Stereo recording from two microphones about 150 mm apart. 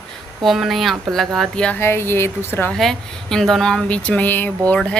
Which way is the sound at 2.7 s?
Centre (ahead or behind).